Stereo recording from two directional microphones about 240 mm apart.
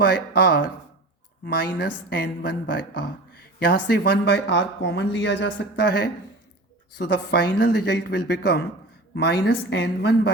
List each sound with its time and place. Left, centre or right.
0.0 s a woman's voice: left